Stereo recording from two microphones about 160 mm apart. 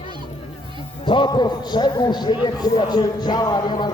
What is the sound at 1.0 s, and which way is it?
A man's voice, 30° left (ahead or behind).